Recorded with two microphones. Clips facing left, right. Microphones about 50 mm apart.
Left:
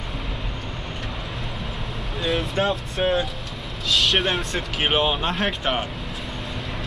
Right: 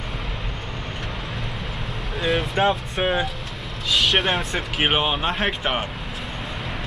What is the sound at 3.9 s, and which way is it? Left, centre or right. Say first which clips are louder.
Speech: right 1 dB; centre.